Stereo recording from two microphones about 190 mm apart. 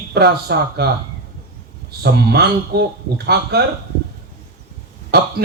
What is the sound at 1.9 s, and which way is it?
Speech, 55° right (ahead or behind).